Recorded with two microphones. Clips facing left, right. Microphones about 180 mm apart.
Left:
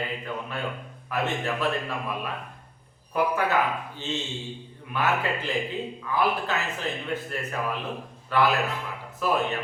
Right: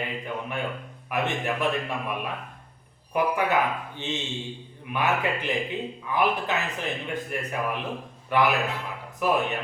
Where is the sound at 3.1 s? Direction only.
15° right (ahead or behind).